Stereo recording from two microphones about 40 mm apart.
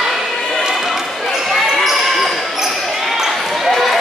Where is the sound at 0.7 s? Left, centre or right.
Centre.